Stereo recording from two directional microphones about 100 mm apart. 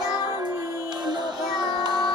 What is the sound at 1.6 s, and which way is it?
Music, 45° right (ahead or behind).